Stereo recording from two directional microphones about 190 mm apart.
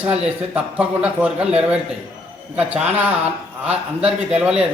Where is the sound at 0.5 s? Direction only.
5° right (ahead or behind).